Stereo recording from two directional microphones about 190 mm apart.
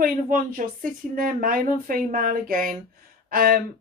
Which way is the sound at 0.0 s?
45° right (ahead or behind).